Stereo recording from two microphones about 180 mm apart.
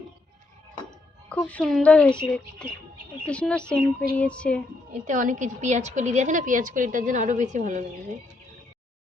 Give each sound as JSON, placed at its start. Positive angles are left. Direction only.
{"t": 1.3, "sound": "speech", "side_deg": 10}
{"t": 5.0, "sound": "a woman's voice", "side_deg": -45}